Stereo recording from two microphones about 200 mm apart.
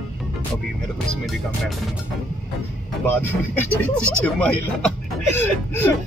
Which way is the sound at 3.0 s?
10° left (ahead or behind).